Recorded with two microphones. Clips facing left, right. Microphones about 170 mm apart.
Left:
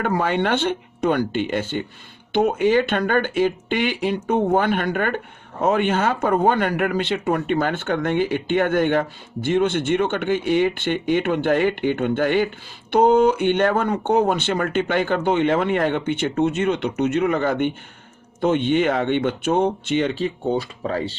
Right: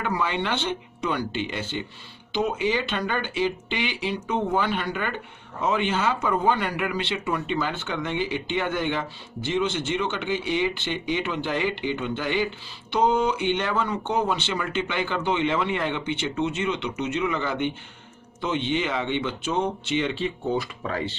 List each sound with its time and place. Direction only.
0.0 s speech: 50° left (ahead or behind); by 21.2 s 35° left (ahead or behind)